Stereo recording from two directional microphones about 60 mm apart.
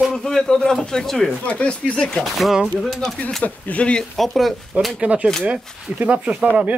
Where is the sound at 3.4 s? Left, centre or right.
Left.